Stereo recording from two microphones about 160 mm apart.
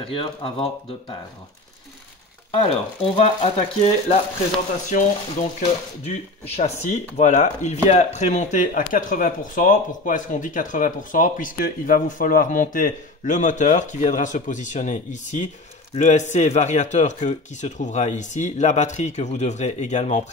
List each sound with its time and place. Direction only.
0.0 s speech: 35° left (ahead or behind)
2.5 s speech: 40° left (ahead or behind)
4.9 s speech: 55° left (ahead or behind)
5.6 s speech: 40° left (ahead or behind)